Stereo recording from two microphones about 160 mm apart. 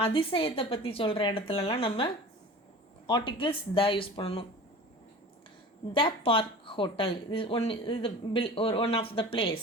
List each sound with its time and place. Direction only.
0.0 s speech: 35° left (ahead or behind)
3.1 s speech: 30° left (ahead or behind)
5.9 s speech: 30° left (ahead or behind)